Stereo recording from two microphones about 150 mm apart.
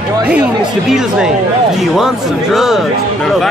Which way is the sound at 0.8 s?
5° right (ahead or behind).